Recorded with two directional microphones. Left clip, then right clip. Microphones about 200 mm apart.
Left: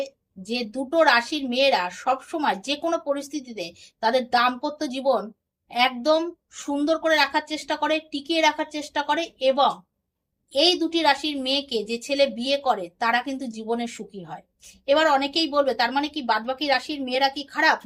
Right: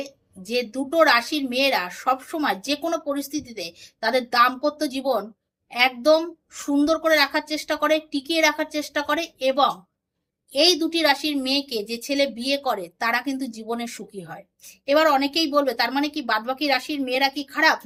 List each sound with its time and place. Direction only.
0.0 s a woman's voice: 15° right (ahead or behind)